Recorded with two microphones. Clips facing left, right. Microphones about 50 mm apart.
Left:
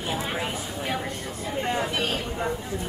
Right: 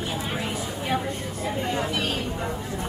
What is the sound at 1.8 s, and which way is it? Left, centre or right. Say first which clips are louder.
Speech: even; centre.